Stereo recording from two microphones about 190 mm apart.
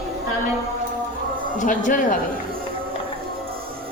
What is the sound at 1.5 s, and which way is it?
Speech, 40° left (ahead or behind).